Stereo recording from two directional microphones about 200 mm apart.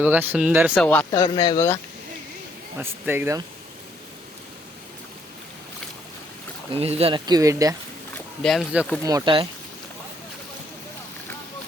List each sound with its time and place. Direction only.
0.0 s speech: 10° right (ahead or behind)
0.9 s speech: 10° left (ahead or behind)
1.2 s speech: 20° left (ahead or behind)
2.7 s speech: 10° right (ahead or behind)
6.7 s speech: 30° right (ahead or behind)
8.4 s speech: centre (ahead or behind)
9.0 s speech: 20° right (ahead or behind)